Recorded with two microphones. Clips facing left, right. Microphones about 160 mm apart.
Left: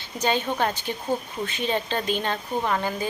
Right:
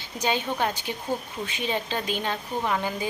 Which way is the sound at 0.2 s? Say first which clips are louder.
Left 2 dB; 10° right (ahead or behind).